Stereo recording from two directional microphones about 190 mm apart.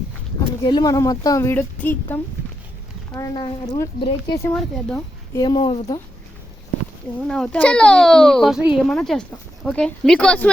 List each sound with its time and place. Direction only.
0.6 s speech: 20° left (ahead or behind)
4.4 s speech: 5° left (ahead or behind)
5.4 s speech: 25° left (ahead or behind)
7.3 s a child's voice: 5° left (ahead or behind)